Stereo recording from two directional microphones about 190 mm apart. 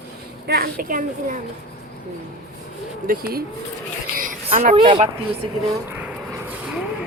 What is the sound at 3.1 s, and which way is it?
Speech, 50° right (ahead or behind).